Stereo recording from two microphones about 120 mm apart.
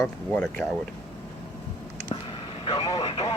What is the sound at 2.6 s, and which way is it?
Vehicle, 35° left (ahead or behind).